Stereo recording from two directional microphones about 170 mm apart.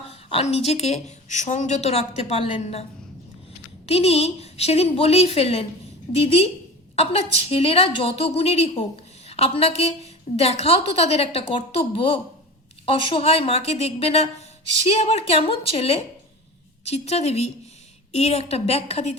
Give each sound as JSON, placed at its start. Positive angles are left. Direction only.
{"t": 0.3, "sound": "a woman's voice", "side_deg": 35}
{"t": 3.8, "sound": "a woman's voice", "side_deg": 35}